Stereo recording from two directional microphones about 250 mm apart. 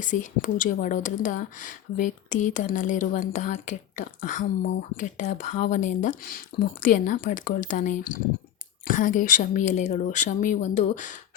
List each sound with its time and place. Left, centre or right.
0.0 s speech: left